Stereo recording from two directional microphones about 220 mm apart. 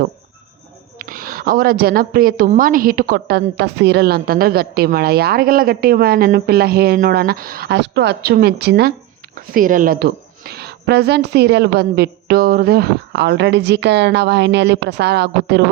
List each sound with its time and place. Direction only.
0.9 s a woman's voice: 40° right (ahead or behind)